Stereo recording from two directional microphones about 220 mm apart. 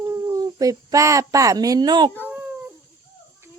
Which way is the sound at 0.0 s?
15° right (ahead or behind).